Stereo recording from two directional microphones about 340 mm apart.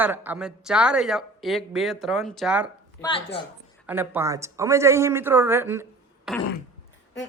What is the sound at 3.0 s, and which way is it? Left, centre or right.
Speech, centre.